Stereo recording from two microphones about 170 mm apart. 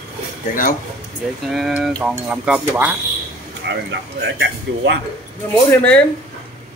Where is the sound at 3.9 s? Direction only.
90° right.